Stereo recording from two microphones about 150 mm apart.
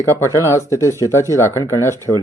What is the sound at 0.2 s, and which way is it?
Speech, 20° left (ahead or behind).